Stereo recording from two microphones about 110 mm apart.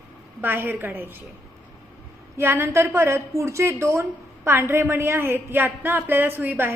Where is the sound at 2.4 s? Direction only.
20° right (ahead or behind).